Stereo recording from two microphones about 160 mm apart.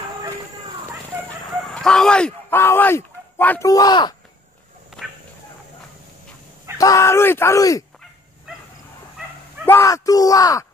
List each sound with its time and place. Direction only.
1.6 s speech: 5° left (ahead or behind); by 4.1 s 25° left (ahead or behind)
6.8 s speech: 20° left (ahead or behind)
9.7 s speech: 15° left (ahead or behind)